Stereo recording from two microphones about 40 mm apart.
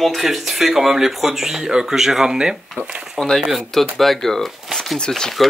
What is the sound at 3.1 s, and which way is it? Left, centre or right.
Speech, centre.